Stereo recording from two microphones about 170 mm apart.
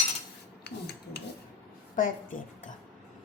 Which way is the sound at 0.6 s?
75° left (ahead or behind).